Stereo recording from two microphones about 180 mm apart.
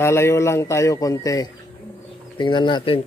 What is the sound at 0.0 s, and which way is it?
Speech, 15° left (ahead or behind).